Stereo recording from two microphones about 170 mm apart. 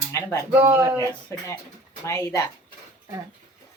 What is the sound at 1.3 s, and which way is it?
Speech, 15° left (ahead or behind).